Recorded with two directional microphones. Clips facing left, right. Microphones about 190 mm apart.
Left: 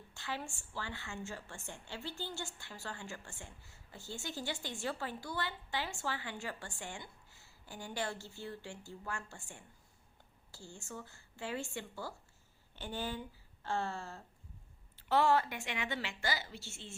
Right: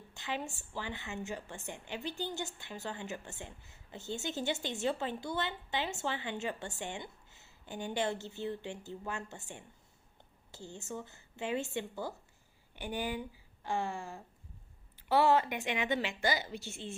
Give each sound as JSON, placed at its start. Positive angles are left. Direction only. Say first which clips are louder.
{"t": 0.1, "sound": "a woman's voice", "louder": "right 4 dB", "side_deg": -20}